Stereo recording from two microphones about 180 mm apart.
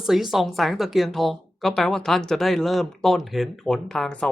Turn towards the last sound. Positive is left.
turn(degrees=5)  # may be behind; listen again after turning